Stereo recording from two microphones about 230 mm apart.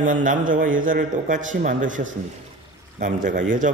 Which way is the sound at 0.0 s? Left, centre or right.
Right.